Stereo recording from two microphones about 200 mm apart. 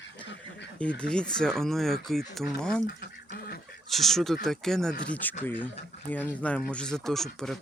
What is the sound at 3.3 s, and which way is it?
Goose, 50° left (ahead or behind).